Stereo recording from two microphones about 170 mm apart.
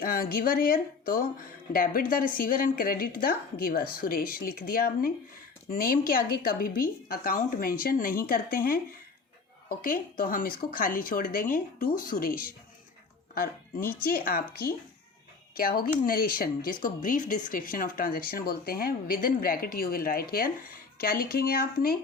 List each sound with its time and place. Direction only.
0.0 s speech: 60° left (ahead or behind)